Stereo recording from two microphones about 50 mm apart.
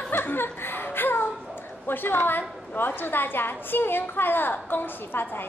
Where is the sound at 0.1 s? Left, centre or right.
Left.